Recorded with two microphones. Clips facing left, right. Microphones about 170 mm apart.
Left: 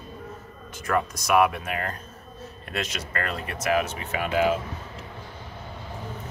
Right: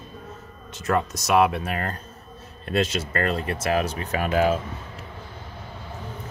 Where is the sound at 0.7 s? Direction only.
25° right (ahead or behind).